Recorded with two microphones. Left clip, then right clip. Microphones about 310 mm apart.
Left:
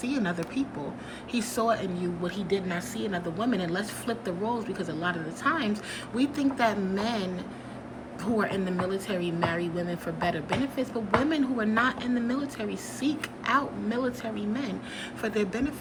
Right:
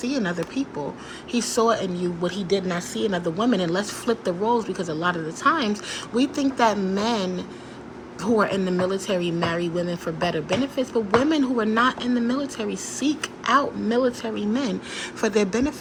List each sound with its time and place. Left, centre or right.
0.0 s speech: centre